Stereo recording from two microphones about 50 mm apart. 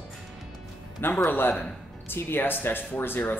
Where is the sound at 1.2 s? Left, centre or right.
Left.